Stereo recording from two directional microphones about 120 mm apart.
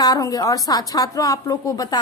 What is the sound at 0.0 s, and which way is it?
A woman's voice, 30° left (ahead or behind).